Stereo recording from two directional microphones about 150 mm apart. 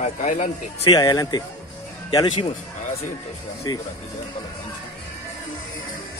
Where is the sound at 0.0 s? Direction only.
55° left (ahead or behind).